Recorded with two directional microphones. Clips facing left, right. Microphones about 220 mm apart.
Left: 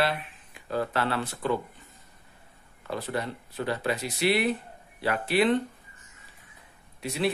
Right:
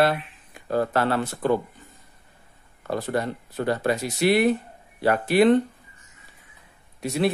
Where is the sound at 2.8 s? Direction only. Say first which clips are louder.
Right 6 dB; 45° right (ahead or behind).